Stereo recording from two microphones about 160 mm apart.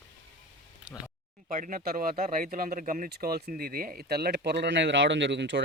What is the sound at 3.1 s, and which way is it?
Speech, 70° right (ahead or behind).